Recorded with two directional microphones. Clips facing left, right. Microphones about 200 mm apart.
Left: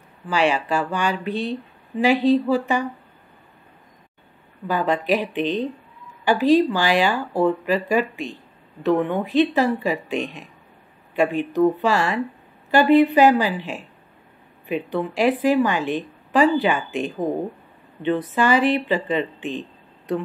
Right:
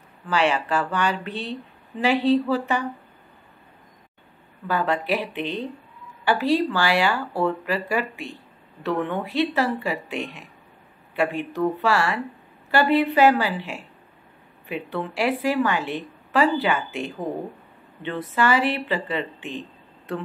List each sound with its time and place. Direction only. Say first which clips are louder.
0.3 s a woman's voice: left 2 dB; 10° left (ahead or behind)
4.6 s a woman's voice: left 3 dB; 15° left (ahead or behind)